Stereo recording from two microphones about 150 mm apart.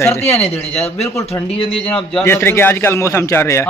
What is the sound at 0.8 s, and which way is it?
Speech, 45° left (ahead or behind).